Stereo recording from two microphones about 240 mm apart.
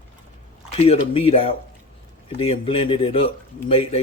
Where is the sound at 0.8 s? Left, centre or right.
Left.